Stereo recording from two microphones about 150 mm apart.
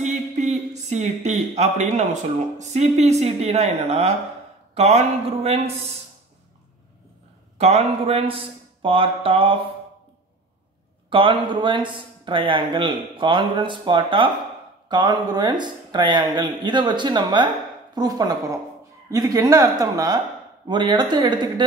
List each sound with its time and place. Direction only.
0.0 s a sound: 50° right (ahead or behind)
2.6 s speech: 50° right (ahead or behind)
7.5 s speech: 45° right (ahead or behind)
11.1 s speech: 35° right (ahead or behind)